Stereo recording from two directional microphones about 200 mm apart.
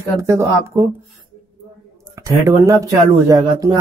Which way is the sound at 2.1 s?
15° right (ahead or behind).